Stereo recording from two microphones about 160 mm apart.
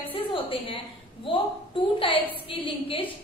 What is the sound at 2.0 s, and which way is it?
A woman's voice, 35° left (ahead or behind).